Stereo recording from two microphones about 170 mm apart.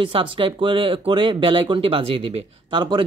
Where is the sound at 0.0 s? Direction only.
30° right (ahead or behind).